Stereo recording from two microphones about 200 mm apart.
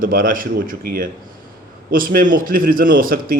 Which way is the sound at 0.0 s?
45° right (ahead or behind).